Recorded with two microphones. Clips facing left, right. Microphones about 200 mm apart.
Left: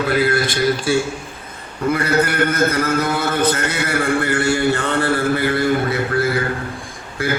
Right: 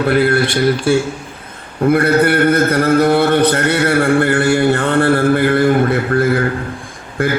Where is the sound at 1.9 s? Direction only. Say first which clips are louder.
Right 6 dB; 60° right (ahead or behind).